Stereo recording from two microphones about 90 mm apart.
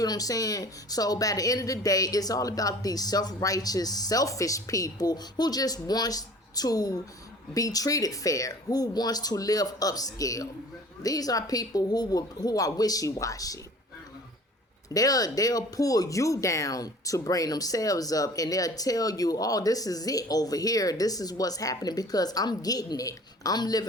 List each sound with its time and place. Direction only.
0.0 s speech: 45° left (ahead or behind)
14.8 s speech: 40° left (ahead or behind)